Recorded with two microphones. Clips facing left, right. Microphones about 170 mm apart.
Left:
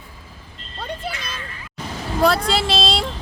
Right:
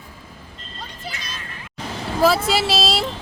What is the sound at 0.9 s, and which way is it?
Vehicle, 60° left (ahead or behind).